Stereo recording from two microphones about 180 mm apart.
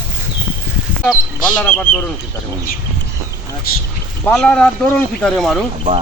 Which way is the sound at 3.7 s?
55° left (ahead or behind).